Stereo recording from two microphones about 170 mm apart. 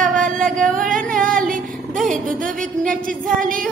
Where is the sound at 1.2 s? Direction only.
55° right (ahead or behind).